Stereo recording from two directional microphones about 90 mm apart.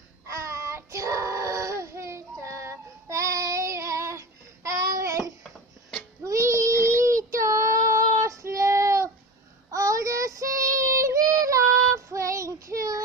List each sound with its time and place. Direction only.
0.3 s child singing: 35° right (ahead or behind)